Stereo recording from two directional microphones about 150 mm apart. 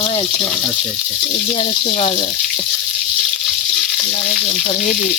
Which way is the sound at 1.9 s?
40° left (ahead or behind).